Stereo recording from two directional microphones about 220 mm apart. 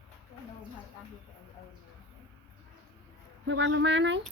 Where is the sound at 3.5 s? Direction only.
55° right (ahead or behind).